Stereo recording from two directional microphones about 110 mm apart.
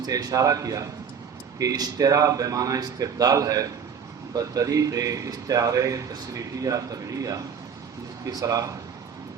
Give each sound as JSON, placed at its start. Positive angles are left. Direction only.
{"t": 0.0, "sound": "a man's voice", "side_deg": -35}